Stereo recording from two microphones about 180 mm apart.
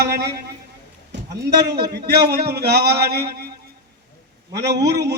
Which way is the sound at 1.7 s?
65° right (ahead or behind).